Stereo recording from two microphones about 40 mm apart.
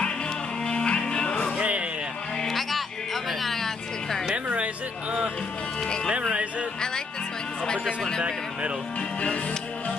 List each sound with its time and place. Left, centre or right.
0.7 s music: left
1.6 s music: right
2.4 s music: centre
7.8 s speech: centre